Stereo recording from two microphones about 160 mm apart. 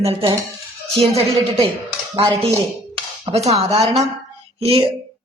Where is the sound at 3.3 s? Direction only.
40° right (ahead or behind).